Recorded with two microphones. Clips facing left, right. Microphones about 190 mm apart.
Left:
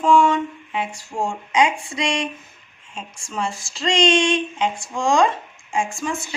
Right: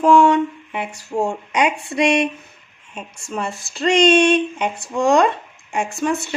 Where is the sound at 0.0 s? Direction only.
65° right (ahead or behind).